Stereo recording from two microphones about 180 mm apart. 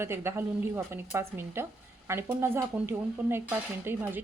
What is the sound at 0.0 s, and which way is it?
Speech, 15° right (ahead or behind).